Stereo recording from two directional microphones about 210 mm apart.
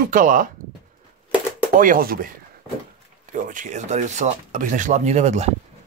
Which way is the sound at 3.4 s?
35° right (ahead or behind).